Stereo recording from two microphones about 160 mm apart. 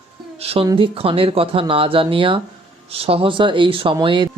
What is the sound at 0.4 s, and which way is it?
Speech, 35° right (ahead or behind).